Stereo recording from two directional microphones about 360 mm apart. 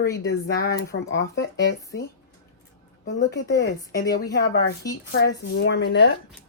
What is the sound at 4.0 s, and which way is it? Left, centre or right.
Speech, left.